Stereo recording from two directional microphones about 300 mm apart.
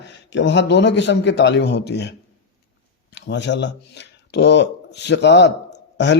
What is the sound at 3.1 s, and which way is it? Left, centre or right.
Speech, left.